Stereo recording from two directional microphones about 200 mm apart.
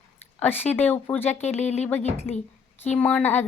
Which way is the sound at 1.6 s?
35° left (ahead or behind).